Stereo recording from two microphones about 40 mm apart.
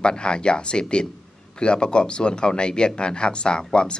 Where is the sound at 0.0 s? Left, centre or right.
Left.